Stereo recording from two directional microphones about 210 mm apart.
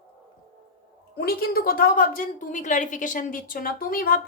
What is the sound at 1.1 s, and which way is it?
A woman's voice, 45° left (ahead or behind).